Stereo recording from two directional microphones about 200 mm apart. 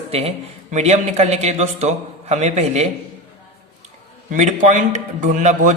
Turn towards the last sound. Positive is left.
turn(degrees=-35)  # may be behind; listen again after turning